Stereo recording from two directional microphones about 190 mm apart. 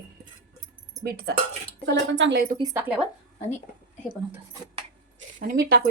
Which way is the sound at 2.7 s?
10° right (ahead or behind).